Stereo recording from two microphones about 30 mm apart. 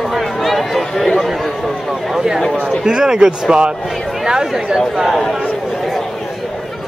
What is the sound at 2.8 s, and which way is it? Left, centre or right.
Speech, right.